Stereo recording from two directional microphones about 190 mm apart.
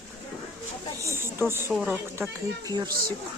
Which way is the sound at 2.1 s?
15° right (ahead or behind).